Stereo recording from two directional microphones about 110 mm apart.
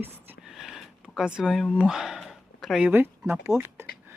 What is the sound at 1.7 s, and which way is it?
Speech, 5° right (ahead or behind).